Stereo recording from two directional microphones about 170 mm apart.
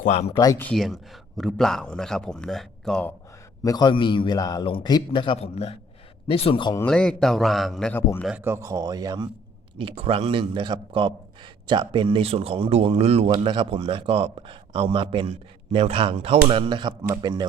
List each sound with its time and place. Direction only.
0.0 s speech: 40° left (ahead or behind)
0.3 s a man's voice: 20° left (ahead or behind)
0.6 s speech: centre (ahead or behind)
3.6 s a man's voice: 25° left (ahead or behind)
6.7 s speech: 5° left (ahead or behind)
8.4 s speech: 15° right (ahead or behind)
9.7 s a man's voice: 35° right (ahead or behind)